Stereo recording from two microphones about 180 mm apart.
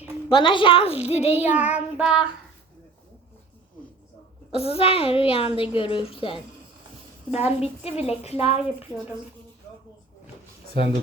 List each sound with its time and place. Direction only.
0.3 s a woman's voice: 25° left (ahead or behind)
1.4 s child singing: 10° right (ahead or behind)
4.5 s a woman's voice: 35° left (ahead or behind)
7.4 s a woman's voice: 5° right (ahead or behind)
7.9 s a woman's voice: 35° left (ahead or behind)